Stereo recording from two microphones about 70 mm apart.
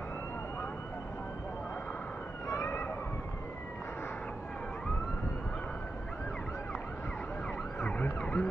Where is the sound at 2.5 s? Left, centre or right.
Left.